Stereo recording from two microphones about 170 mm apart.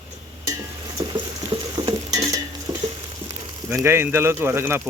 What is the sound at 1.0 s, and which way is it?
Patter, 25° right (ahead or behind).